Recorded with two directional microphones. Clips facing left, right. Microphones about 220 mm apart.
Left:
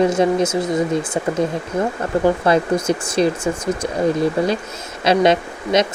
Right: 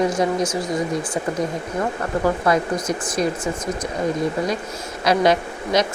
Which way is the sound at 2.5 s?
30° left (ahead or behind).